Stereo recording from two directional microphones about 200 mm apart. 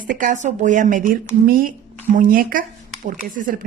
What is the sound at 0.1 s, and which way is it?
Speech, 40° right (ahead or behind).